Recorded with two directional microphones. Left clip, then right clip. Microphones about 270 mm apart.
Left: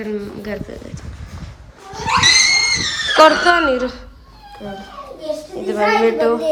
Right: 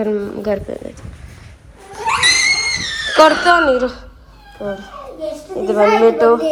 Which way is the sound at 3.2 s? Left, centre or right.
Centre.